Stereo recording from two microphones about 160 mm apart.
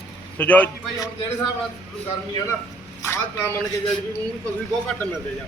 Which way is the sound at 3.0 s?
15° left (ahead or behind).